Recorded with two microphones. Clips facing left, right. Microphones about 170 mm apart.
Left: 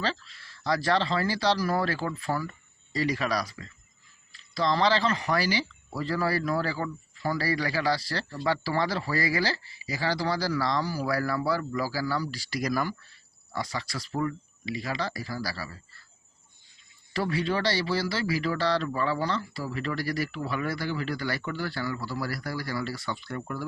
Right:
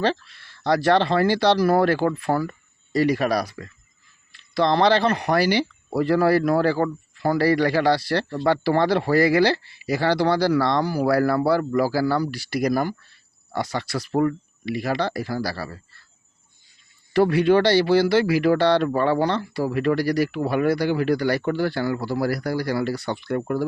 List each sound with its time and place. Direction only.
0.0 s a man's voice: 60° right (ahead or behind)
13.5 s a man's voice: 65° right (ahead or behind)
17.2 s a man's voice: 60° right (ahead or behind)